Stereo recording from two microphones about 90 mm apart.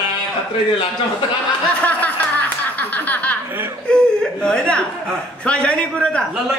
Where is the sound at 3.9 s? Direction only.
10° left (ahead or behind).